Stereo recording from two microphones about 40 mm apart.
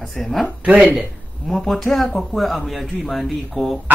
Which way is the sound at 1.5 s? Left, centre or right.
Centre.